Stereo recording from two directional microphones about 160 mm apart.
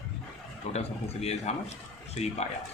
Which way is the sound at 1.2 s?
45° left (ahead or behind).